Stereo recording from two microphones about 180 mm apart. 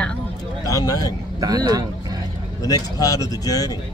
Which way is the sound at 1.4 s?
20° right (ahead or behind).